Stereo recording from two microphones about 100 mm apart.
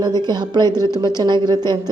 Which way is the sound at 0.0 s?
45° right (ahead or behind).